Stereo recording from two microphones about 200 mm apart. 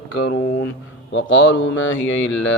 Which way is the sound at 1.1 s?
70° left (ahead or behind).